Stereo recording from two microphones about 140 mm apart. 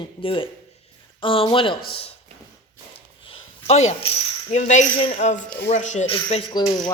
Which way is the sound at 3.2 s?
50° left (ahead or behind).